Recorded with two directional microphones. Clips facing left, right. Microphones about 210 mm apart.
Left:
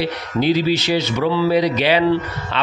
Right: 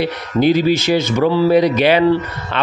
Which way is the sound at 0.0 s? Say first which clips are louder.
Right 4 dB; 50° right (ahead or behind).